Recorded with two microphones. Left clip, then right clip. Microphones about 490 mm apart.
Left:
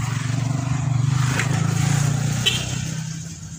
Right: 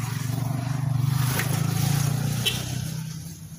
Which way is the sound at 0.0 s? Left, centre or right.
Right.